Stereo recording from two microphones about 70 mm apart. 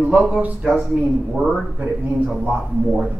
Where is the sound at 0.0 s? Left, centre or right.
Centre.